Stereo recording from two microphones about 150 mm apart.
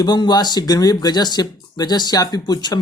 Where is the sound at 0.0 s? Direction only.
30° left (ahead or behind).